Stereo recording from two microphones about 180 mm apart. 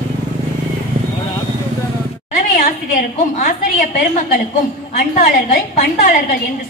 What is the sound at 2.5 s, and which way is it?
A woman's voice, 50° left (ahead or behind).